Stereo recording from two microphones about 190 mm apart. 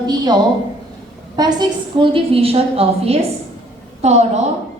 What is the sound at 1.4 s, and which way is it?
A woman's voice, 20° right (ahead or behind).